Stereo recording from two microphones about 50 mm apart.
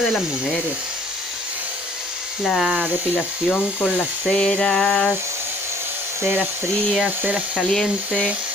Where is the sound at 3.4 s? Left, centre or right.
Centre.